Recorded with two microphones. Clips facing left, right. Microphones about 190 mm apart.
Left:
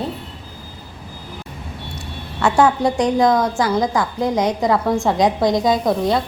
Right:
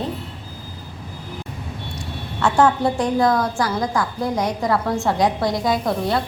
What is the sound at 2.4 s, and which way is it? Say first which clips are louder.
A woman's voice: left 2 dB; 10° left (ahead or behind).